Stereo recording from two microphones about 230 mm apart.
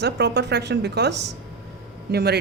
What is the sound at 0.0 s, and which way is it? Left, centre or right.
A man's voice, right.